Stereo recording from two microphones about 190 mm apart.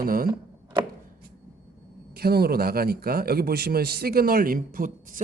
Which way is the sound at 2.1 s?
55° right (ahead or behind).